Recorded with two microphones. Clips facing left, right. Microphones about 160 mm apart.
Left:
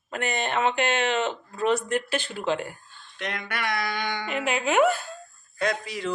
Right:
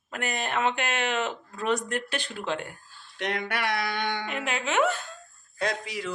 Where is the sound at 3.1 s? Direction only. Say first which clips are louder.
Right 2 dB; 65° right (ahead or behind).